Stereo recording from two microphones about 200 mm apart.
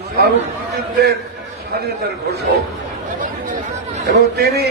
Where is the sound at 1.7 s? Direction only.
50° right (ahead or behind).